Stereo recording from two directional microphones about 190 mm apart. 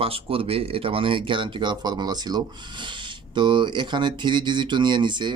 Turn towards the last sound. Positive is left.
turn(degrees=-25)  # may be behind; listen again after turning